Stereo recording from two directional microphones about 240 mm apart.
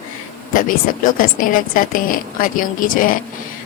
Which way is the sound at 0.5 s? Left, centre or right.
Left.